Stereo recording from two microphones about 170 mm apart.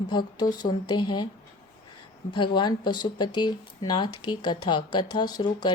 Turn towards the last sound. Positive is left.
turn(degrees=25)  # may be behind; listen again after turning